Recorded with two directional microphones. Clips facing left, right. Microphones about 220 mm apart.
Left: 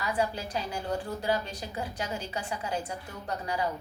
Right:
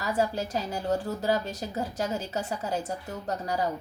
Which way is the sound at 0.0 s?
45° right (ahead or behind).